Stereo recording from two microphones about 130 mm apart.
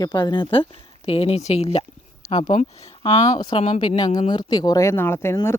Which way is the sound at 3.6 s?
50° left (ahead or behind).